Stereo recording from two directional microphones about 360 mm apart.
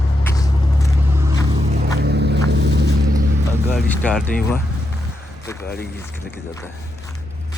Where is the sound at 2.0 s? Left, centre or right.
Right.